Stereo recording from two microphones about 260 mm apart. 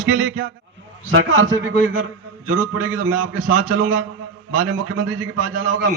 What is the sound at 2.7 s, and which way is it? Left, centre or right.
A man's voice, right.